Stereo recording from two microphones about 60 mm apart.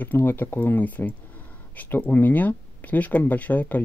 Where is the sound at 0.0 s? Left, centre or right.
Left.